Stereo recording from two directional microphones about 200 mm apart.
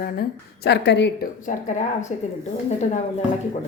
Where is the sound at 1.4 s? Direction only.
40° left (ahead or behind).